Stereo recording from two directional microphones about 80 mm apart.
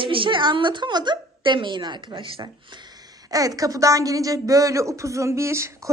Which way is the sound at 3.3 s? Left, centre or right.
Right.